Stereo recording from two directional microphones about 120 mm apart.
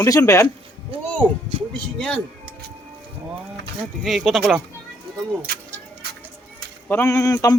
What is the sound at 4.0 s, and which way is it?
Speech, centre (ahead or behind).